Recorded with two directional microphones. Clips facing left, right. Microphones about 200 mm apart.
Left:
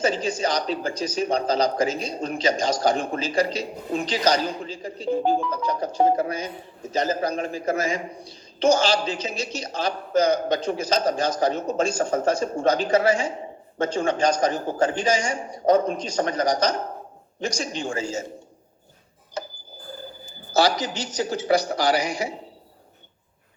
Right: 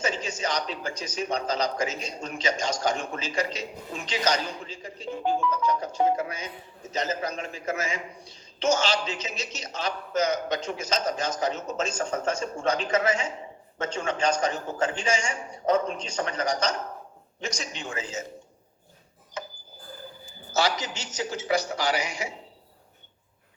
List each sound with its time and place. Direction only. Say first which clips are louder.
0.0 s a man's voice: left 6 dB; 35° left (ahead or behind)
20.5 s a man's voice: left 5 dB; 35° left (ahead or behind)